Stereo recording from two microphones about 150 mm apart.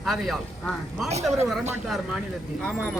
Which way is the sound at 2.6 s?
Centre (ahead or behind).